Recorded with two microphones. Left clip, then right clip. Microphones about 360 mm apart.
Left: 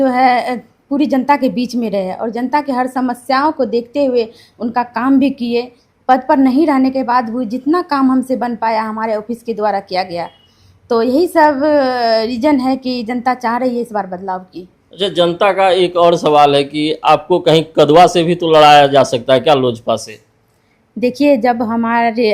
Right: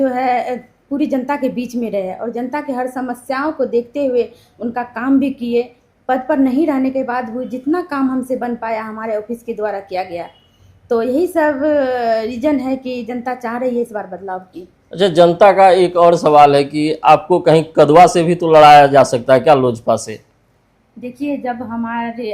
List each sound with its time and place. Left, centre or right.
0.0 s a woman's voice: left
14.8 s a man's voice: centre
21.0 s a woman's voice: left